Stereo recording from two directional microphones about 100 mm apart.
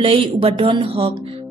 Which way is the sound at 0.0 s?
65° right (ahead or behind).